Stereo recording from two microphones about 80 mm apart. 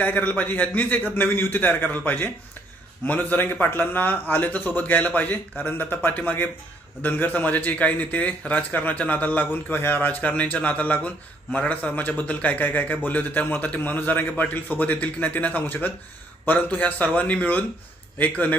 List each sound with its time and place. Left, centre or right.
0.0 s a man's voice: centre